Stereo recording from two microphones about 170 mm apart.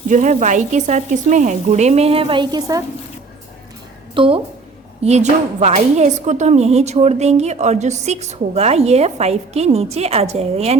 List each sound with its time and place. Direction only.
0.1 s frying: 45° right (ahead or behind); by 2.8 s 20° right (ahead or behind)
4.1 s a woman's voice: 30° right (ahead or behind)
5.0 s a woman's voice: 40° right (ahead or behind)